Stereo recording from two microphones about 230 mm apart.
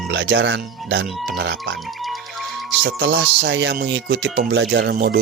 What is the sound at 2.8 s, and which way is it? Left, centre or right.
Speech, right.